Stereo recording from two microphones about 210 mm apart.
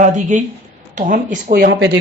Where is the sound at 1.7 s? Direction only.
55° right (ahead or behind).